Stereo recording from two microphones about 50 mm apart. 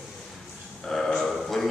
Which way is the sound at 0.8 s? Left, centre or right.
Centre.